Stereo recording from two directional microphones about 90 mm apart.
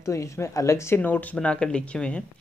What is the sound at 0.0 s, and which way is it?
Speech, 35° left (ahead or behind).